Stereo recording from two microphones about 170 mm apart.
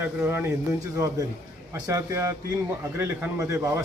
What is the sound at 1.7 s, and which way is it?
Speech, 15° right (ahead or behind).